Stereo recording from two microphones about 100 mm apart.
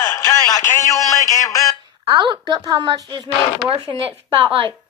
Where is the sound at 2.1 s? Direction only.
40° right (ahead or behind).